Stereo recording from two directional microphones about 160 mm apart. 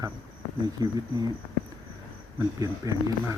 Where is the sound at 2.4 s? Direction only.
20° right (ahead or behind).